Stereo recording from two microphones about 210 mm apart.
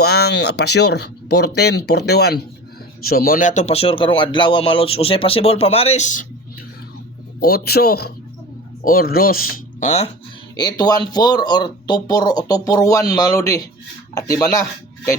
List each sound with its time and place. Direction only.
0.0 s speech: 50° left (ahead or behind); by 6.2 s 35° left (ahead or behind)
7.4 s speech: 50° left (ahead or behind); by 10.1 s 35° left (ahead or behind)
10.6 s speech: 20° left (ahead or behind)